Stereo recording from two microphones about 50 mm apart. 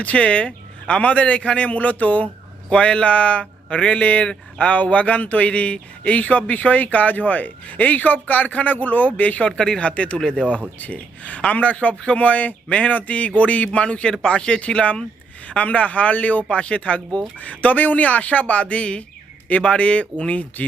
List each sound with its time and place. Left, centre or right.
0.0 s a man's voice: left
9.5 s a man's voice: centre